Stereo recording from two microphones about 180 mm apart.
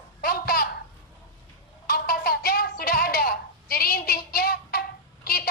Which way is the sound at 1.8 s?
55° left (ahead or behind).